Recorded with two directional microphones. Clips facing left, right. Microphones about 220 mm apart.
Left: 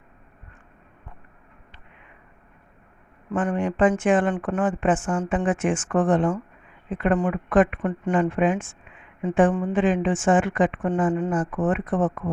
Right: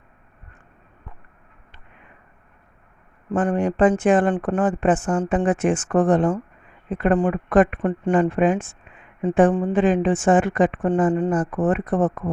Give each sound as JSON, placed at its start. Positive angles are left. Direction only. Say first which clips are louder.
{"t": 3.3, "sound": "a woman's voice", "louder": "right 3 dB", "side_deg": -35}